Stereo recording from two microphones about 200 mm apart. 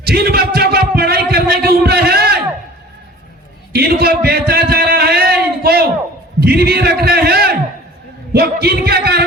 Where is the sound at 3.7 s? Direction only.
50° right (ahead or behind).